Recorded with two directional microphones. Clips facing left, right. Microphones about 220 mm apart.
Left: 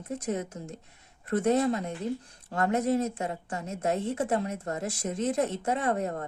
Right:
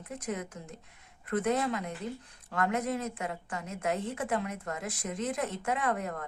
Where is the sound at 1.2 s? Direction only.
40° left (ahead or behind).